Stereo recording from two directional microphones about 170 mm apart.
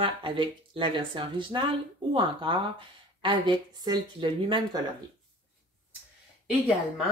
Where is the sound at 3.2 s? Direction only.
30° right (ahead or behind).